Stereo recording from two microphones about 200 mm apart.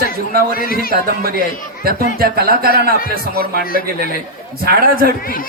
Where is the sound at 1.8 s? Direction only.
50° right (ahead or behind).